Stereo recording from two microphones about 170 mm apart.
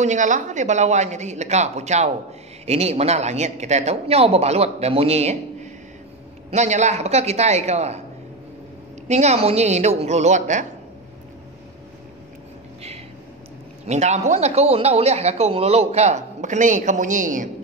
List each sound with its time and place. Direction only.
0.0 s speech: 45° right (ahead or behind)
9.0 s speech: 40° right (ahead or behind)
13.8 s speech: 40° right (ahead or behind)